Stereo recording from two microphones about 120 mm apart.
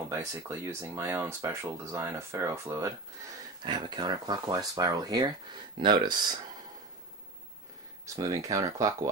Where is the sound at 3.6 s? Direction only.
35° right (ahead or behind).